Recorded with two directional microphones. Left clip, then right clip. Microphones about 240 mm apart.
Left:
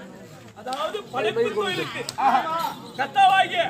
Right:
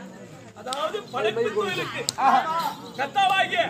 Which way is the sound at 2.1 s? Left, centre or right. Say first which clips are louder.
Right 2 dB; right.